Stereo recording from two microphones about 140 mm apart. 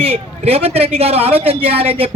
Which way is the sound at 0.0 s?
45° right (ahead or behind).